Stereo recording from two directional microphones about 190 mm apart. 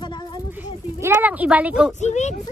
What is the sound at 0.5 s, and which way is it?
Speech, 10° right (ahead or behind).